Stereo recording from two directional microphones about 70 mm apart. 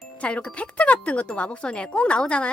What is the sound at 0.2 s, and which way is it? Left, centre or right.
Speech, centre.